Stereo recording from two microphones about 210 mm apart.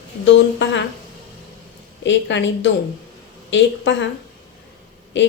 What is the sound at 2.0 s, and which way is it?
Speech, 60° left (ahead or behind).